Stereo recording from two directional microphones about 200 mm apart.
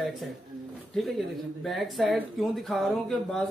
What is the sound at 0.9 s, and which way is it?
Speech, centre (ahead or behind).